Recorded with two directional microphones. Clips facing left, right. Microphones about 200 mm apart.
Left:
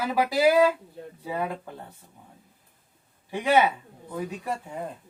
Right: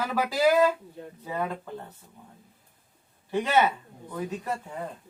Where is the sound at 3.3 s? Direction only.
15° left (ahead or behind).